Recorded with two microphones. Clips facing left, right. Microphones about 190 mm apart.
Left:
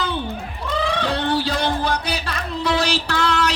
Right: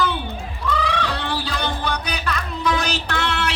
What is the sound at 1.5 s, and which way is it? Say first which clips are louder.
Music: left 4 dB; 30° left (ahead or behind).